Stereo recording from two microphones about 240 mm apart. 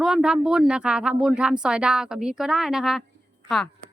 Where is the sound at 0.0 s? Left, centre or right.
Centre.